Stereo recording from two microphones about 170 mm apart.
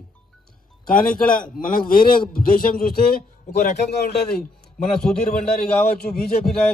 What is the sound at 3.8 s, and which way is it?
Speech, 70° left (ahead or behind).